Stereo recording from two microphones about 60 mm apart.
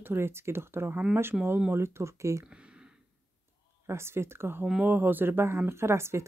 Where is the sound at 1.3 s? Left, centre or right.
Centre.